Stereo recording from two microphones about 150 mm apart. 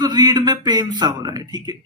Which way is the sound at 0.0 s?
30° right (ahead or behind).